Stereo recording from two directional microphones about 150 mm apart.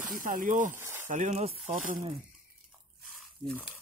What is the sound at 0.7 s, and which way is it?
Sizzle, 15° right (ahead or behind).